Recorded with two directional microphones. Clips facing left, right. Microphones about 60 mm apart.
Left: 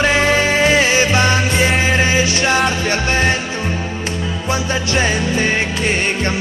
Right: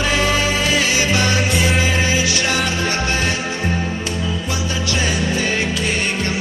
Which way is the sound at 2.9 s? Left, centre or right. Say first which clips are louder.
Left 4 dB; left.